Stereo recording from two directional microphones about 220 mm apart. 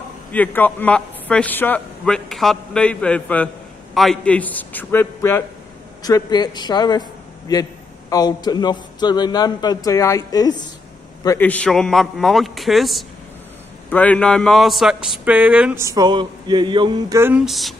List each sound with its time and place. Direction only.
0.3 s a man's voice: 5° left (ahead or behind)
11.2 s a man's voice: 10° left (ahead or behind)